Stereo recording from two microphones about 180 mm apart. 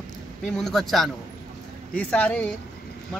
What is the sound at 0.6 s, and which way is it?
Speech, centre (ahead or behind).